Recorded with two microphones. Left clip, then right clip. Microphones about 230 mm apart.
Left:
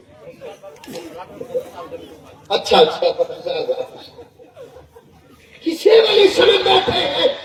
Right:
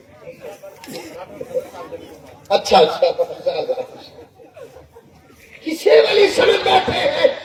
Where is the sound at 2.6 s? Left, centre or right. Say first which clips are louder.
Even; left.